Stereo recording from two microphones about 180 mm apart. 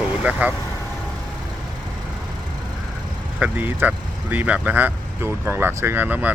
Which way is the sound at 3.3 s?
10° right (ahead or behind).